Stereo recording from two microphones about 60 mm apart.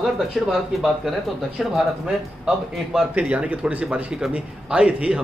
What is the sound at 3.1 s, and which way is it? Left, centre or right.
A man's voice, right.